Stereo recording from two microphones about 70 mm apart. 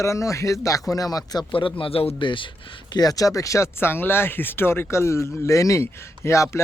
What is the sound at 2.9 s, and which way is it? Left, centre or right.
Speech, left.